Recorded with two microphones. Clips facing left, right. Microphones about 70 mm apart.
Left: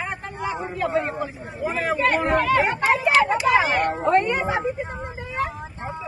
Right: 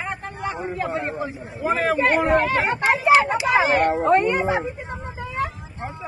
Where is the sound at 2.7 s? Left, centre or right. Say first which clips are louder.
Right 3 dB; centre.